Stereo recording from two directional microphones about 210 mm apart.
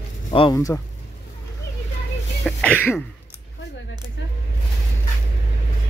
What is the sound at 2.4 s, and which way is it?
Throat clearing, 5° left (ahead or behind).